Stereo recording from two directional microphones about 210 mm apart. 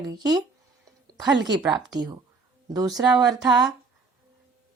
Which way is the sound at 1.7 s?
20° right (ahead or behind).